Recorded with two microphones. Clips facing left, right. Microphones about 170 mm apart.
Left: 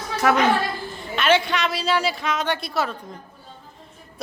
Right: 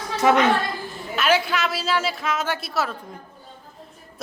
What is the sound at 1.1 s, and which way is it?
A woman's voice, 5° right (ahead or behind).